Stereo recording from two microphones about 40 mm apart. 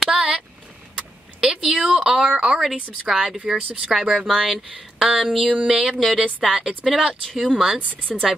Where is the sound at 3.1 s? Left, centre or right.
Centre.